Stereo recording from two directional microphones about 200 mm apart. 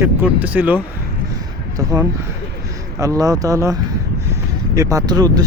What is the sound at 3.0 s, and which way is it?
Speech, 15° right (ahead or behind).